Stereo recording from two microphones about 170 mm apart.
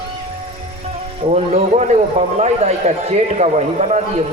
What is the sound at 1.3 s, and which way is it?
A man's voice, 40° right (ahead or behind).